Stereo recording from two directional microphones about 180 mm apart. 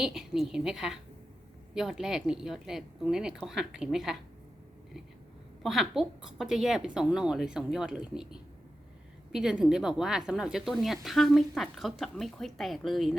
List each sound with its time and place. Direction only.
0.0 s speech: centre (ahead or behind)
5.6 s speech: centre (ahead or behind)